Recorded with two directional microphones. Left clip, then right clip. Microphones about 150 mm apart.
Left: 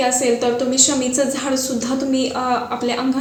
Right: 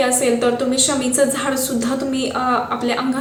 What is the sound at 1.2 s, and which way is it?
A woman's voice, 10° left (ahead or behind).